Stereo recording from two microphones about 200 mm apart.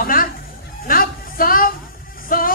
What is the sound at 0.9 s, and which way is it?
Music, 45° left (ahead or behind).